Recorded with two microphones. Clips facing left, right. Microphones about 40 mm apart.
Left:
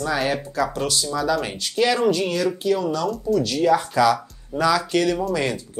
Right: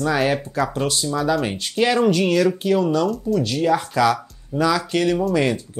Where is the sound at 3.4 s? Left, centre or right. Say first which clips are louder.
Left 1 dB; right.